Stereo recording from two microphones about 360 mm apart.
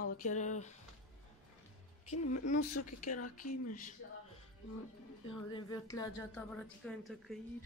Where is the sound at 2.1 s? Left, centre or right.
Left.